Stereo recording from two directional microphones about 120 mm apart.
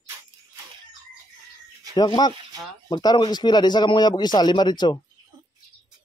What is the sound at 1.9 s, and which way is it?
Speech, 40° left (ahead or behind).